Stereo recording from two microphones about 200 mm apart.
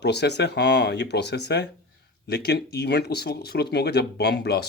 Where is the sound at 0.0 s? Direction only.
55° left (ahead or behind).